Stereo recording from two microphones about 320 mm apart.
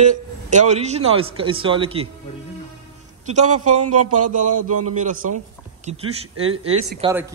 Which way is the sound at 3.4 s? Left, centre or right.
Right.